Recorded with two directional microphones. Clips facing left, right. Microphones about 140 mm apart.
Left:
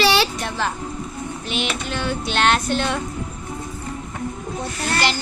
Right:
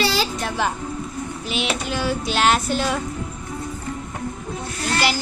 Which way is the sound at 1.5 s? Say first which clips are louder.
Right 1 dB; centre (ahead or behind).